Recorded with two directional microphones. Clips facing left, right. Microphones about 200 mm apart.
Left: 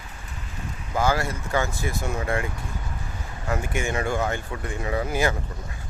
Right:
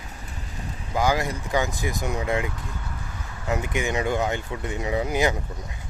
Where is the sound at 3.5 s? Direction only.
20° right (ahead or behind).